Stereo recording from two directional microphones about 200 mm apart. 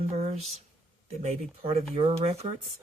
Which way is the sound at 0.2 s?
35° right (ahead or behind).